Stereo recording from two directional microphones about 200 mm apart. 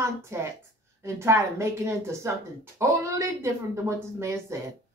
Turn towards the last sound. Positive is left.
turn(degrees=-15)  # may be behind; listen again after turning